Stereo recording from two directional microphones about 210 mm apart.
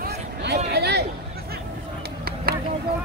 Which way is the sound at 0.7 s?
50° right (ahead or behind).